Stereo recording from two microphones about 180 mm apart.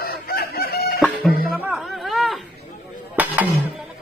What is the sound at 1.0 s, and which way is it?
Music, 5° left (ahead or behind).